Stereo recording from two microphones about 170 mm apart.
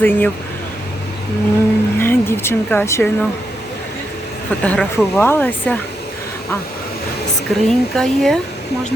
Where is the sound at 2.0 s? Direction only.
15° left (ahead or behind).